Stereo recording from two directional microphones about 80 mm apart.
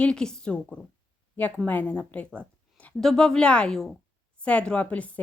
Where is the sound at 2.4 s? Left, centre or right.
Centre.